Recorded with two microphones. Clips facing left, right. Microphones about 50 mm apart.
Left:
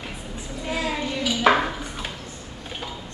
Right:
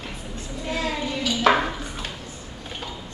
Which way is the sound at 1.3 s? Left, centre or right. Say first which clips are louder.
Even; centre.